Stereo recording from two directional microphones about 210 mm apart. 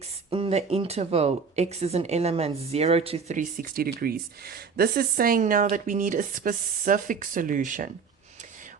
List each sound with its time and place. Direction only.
0.3 s speech: 25° right (ahead or behind)